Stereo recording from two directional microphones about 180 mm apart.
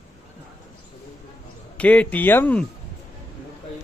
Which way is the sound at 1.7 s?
10° left (ahead or behind).